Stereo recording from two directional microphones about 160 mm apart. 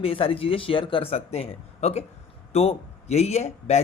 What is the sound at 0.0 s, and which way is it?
Speech, 35° left (ahead or behind).